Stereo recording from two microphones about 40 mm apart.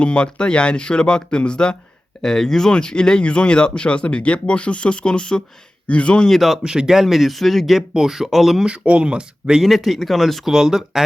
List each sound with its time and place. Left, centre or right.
0.0 s speech: left
2.2 s speech: centre; by 6.1 s left
6.2 s speech: centre
6.6 s speech: centre
6.9 s speech: centre
8.6 s speech: right
9.6 s speech: centre
10.4 s speech: centre